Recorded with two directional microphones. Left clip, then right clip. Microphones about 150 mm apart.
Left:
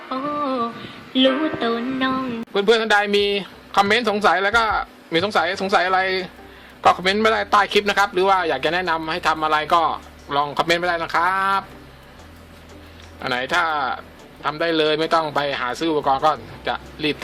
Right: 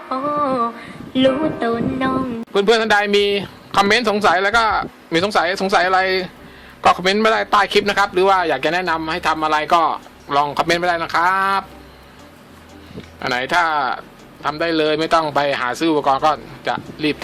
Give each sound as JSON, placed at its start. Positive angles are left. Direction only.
{"t": 0.1, "sound": "a sound", "side_deg": -15}
{"t": 1.1, "sound": "a woman's voice", "side_deg": 0}
{"t": 1.5, "sound": "a man's voice", "side_deg": -10}
{"t": 13.2, "sound": "a man's voice", "side_deg": -15}